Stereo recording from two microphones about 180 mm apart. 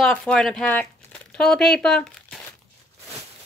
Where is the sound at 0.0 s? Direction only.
5° left (ahead or behind).